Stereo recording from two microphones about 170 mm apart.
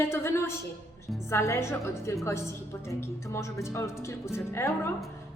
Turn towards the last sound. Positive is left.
turn(degrees=15)  # may be behind; listen again after turning